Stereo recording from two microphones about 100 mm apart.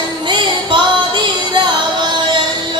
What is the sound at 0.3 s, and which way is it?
Music, 50° right (ahead or behind).